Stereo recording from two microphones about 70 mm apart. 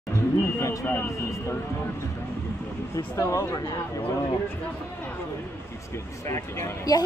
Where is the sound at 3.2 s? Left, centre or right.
Left.